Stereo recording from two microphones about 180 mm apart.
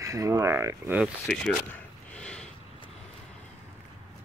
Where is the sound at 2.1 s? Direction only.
5° left (ahead or behind).